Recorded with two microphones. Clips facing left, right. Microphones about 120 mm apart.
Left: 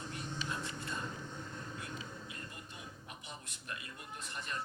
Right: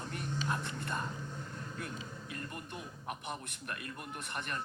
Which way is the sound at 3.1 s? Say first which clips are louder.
Right 9 dB; 60° right (ahead or behind).